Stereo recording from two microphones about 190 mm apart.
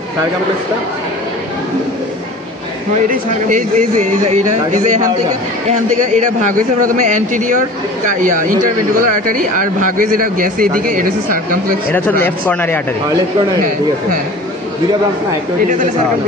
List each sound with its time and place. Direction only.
2.9 s a man's voice: 45° right (ahead or behind)
11.9 s speech: 10° left (ahead or behind)